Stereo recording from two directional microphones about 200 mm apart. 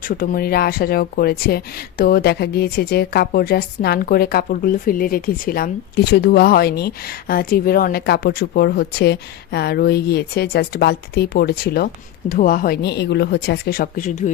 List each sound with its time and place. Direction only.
0.1 s speech: 45° left (ahead or behind)